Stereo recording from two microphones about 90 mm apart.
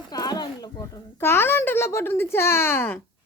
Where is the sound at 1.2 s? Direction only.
25° left (ahead or behind).